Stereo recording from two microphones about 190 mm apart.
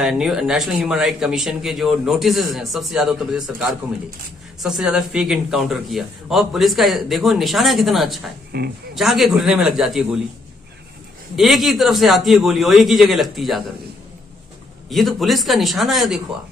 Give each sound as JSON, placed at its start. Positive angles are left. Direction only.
{"t": 0.0, "sound": "speech", "side_deg": 0}
{"t": 8.5, "sound": "speech", "side_deg": -55}
{"t": 8.9, "sound": "speech", "side_deg": 0}
{"t": 11.3, "sound": "speech", "side_deg": 0}
{"t": 14.9, "sound": "speech", "side_deg": 0}